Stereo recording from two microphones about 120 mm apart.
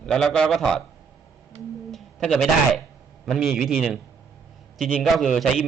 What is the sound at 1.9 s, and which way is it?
A man's voice, 5° left (ahead or behind).